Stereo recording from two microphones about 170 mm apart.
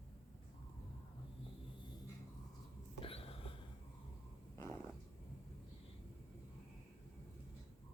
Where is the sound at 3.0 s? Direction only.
35° left (ahead or behind).